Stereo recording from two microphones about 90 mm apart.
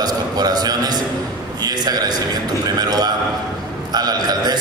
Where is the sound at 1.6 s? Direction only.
50° right (ahead or behind).